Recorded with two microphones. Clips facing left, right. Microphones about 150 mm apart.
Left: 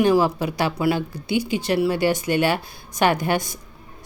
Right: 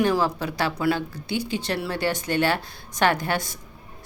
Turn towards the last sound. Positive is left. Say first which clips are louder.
# left 3 dB
turn(degrees=15)  # may be behind; listen again after turning